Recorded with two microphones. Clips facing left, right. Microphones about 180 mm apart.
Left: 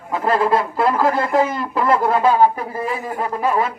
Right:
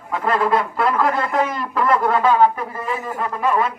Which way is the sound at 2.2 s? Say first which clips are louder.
Left 1 dB; 35° left (ahead or behind).